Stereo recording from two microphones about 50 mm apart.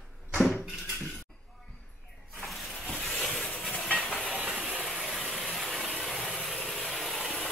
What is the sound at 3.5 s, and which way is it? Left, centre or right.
Train, left.